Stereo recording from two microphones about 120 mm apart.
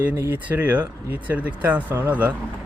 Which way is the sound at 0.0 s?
15° right (ahead or behind).